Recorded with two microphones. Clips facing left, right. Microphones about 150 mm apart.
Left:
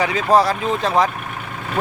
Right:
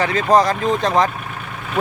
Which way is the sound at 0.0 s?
10° left (ahead or behind).